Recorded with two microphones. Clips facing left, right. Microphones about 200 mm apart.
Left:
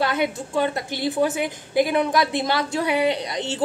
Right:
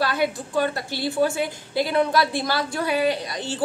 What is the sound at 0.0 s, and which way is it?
Speech, 20° left (ahead or behind).